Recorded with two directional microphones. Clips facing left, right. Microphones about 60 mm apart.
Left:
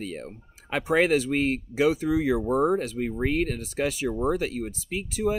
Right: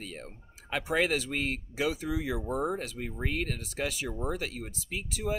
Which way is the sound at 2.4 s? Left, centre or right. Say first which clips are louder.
Left 8 dB; left.